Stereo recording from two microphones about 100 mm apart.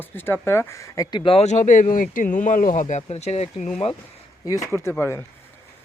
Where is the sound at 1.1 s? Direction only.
60° left (ahead or behind).